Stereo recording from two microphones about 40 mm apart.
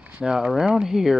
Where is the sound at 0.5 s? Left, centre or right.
Centre.